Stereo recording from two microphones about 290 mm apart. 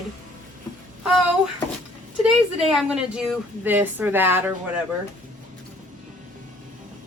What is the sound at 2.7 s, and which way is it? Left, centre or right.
A woman's voice, centre.